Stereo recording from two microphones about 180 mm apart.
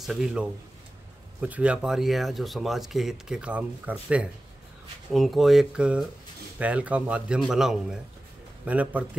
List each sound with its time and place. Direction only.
0.0 s a man's voice: centre (ahead or behind)